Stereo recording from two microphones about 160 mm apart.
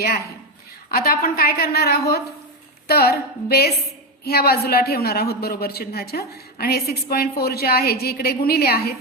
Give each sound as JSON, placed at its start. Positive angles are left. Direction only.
{"t": 0.9, "sound": "a woman's voice", "side_deg": 70}